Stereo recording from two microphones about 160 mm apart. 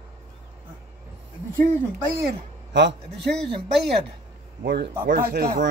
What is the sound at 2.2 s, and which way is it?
A man's voice, 90° right.